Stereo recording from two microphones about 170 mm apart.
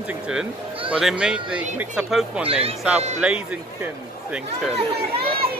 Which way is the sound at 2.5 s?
35° right (ahead or behind).